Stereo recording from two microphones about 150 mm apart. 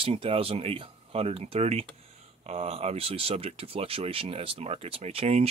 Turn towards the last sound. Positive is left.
turn(degrees=-45)  # may be behind; listen again after turning